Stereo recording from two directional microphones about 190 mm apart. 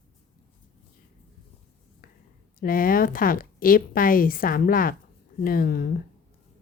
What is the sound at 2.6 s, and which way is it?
A woman's voice, 50° left (ahead or behind).